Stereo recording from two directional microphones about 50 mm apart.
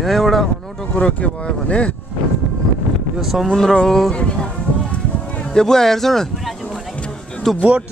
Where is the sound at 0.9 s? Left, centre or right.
Left.